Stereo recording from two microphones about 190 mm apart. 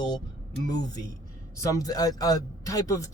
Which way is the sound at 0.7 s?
20° left (ahead or behind).